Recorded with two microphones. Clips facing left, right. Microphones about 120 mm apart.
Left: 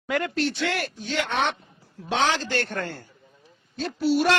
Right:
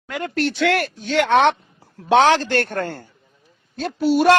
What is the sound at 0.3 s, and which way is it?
Speech, 80° right.